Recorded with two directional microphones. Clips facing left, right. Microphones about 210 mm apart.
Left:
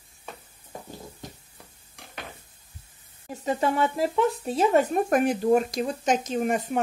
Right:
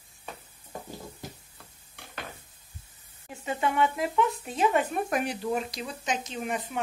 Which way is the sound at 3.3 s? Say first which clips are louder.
Left 4 dB; 40° left (ahead or behind).